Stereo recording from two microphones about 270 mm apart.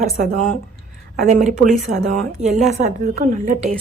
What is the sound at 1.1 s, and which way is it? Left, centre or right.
A woman's voice, right.